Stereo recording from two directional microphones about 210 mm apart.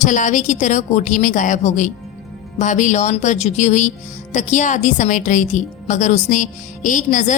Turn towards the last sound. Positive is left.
turn(degrees=35)  # may be behind; listen again after turning